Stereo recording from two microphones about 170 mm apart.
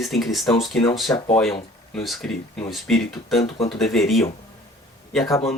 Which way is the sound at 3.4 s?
35° left (ahead or behind).